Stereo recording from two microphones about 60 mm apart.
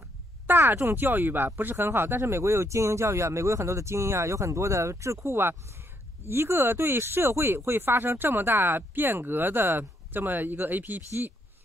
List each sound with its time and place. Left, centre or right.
0.5 s speech: right
6.2 s speech: right